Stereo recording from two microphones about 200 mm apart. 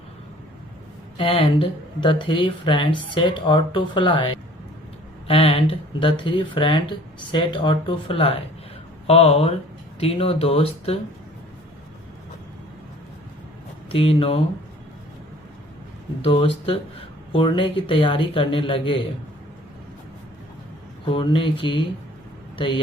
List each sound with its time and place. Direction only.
1.1 s speech: 25° left (ahead or behind)
13.9 s speech: 30° left (ahead or behind)
16.2 s speech: 25° left (ahead or behind)
21.1 s speech: 25° left (ahead or behind)